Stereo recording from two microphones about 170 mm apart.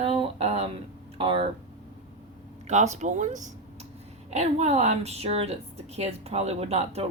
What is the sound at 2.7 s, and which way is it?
A woman's voice, 45° right (ahead or behind).